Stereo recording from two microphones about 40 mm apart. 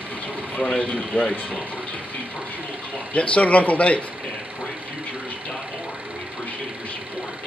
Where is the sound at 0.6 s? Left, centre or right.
Left.